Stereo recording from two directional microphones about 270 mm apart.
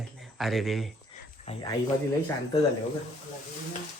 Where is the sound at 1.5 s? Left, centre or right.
Left.